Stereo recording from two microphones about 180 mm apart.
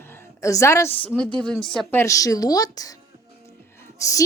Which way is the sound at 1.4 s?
5° left (ahead or behind).